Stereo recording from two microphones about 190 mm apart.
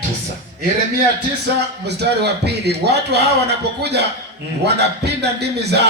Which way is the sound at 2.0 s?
60° right (ahead or behind).